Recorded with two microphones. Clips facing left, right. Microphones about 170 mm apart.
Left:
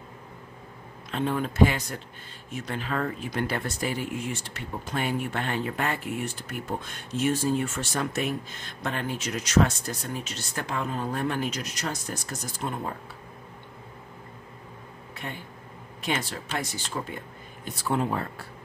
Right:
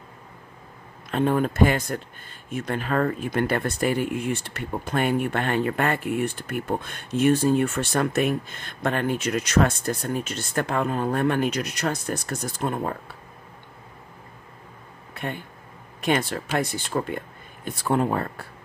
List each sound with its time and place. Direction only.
1.1 s speech: 50° right (ahead or behind)
16.0 s speech: 55° right (ahead or behind)